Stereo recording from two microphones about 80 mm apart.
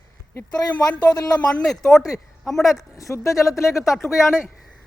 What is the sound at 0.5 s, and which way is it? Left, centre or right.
Speech, left.